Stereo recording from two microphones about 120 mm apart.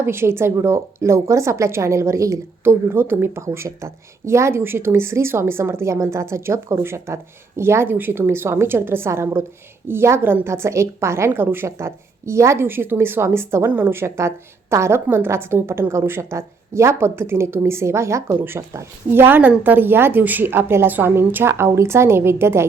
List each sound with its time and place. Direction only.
0.0 s a woman's voice: 20° right (ahead or behind)